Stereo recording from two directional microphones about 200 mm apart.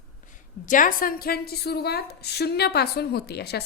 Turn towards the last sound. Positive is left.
turn(degrees=55)  # may be behind; listen again after turning